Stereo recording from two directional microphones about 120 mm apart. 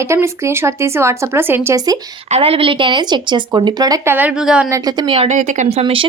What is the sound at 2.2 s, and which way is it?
A woman's voice, 60° right (ahead or behind).